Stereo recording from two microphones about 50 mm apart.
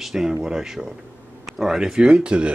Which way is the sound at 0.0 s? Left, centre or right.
Centre.